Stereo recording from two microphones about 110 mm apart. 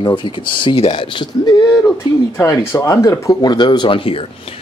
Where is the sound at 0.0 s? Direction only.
45° left (ahead or behind).